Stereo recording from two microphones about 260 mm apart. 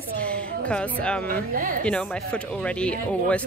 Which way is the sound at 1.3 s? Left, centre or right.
Right.